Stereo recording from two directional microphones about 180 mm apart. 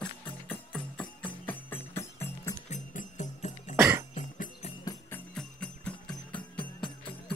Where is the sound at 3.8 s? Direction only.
15° right (ahead or behind).